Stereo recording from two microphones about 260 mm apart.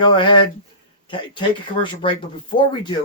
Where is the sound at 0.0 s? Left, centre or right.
Centre.